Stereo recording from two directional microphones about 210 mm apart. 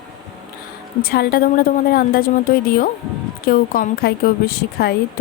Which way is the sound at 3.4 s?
45° left (ahead or behind).